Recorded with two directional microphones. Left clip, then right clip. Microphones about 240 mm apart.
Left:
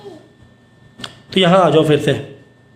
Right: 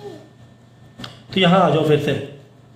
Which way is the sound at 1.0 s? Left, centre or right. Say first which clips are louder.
Left 3 dB; left.